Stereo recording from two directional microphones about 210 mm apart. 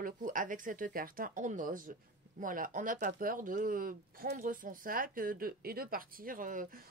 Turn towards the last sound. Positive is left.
turn(degrees=-40)  # may be behind; listen again after turning